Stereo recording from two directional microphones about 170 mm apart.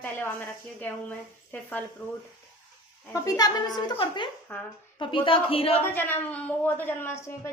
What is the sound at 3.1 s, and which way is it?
A woman's voice, 20° left (ahead or behind).